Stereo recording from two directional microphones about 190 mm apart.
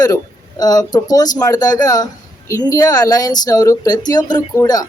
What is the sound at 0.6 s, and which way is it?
Speech, 20° left (ahead or behind).